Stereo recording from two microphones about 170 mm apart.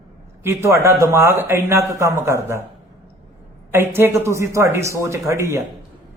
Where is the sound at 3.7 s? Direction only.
15° right (ahead or behind).